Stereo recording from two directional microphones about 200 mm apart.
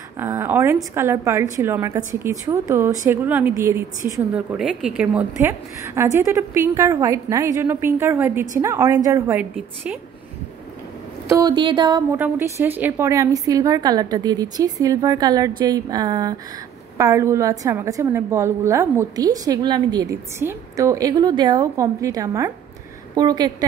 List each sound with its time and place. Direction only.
0.2 s a woman's voice: 15° right (ahead or behind)
11.2 s a woman's voice: 15° right (ahead or behind)